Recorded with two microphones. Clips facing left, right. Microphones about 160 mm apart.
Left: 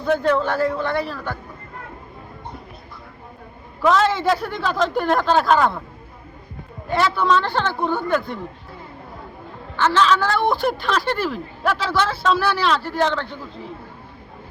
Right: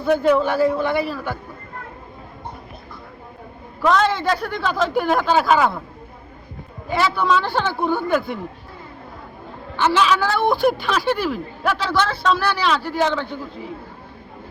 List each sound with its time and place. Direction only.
0.0 s a man's voice: 5° right (ahead or behind)
3.8 s a woman's voice: centre (ahead or behind)
6.8 s a woman's voice: 5° right (ahead or behind)
9.7 s a woman's voice: 10° right (ahead or behind)